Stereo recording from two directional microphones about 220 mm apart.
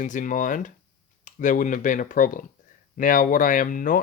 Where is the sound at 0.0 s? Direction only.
35° left (ahead or behind).